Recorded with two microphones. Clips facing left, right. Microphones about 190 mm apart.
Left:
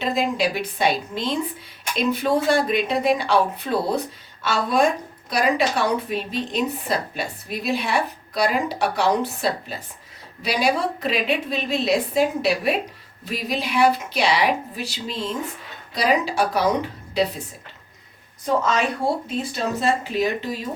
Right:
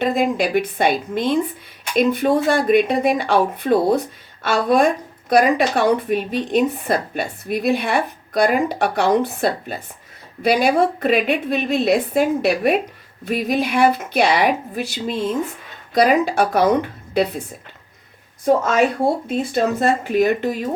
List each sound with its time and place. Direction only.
0.0 s a woman's voice: 55° right (ahead or behind)
18.4 s a woman's voice: 50° right (ahead or behind)